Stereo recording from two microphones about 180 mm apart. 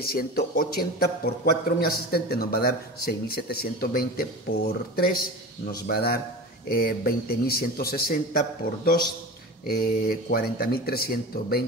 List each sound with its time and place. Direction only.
0.0 s a man's voice: 60° left (ahead or behind)